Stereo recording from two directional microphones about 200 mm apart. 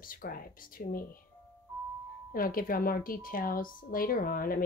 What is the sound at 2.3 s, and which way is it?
A woman's voice, 45° left (ahead or behind).